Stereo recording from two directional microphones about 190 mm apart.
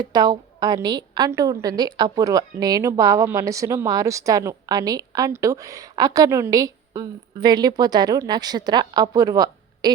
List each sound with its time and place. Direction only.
0.0 s a woman's voice: 20° right (ahead or behind)